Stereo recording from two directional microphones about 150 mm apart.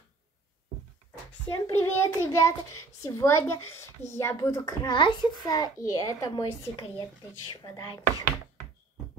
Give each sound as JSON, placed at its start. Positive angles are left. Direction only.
{"t": 1.5, "sound": "a child's voice", "side_deg": 20}